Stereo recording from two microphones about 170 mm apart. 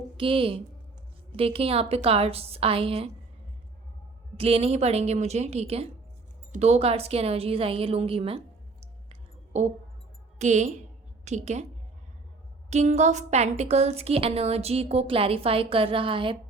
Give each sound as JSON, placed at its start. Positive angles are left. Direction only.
{"t": 0.2, "sound": "a woman's voice", "side_deg": -30}
{"t": 4.4, "sound": "a woman's voice", "side_deg": -35}
{"t": 9.5, "sound": "a woman's voice", "side_deg": -40}
{"t": 12.7, "sound": "a woman's voice", "side_deg": -45}